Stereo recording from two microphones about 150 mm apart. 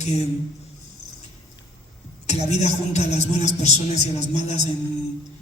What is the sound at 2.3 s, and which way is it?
A woman's voice, 50° left (ahead or behind).